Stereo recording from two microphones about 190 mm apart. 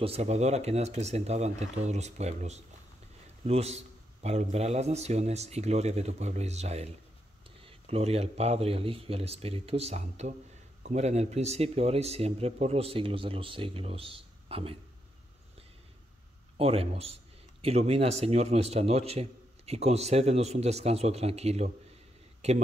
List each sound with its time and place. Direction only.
0.0 s a man's voice: 35° right (ahead or behind)
16.5 s a man's voice: 30° right (ahead or behind)